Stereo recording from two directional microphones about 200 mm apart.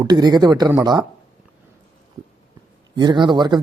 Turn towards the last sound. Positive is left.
turn(degrees=-20)  # may be behind; listen again after turning